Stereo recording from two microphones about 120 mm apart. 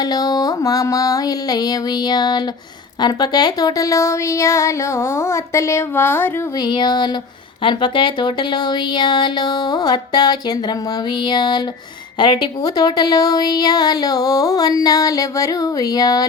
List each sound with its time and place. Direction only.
0.0 s a woman's voice: 30° left (ahead or behind)
6.6 s a woman's voice: 35° left (ahead or behind)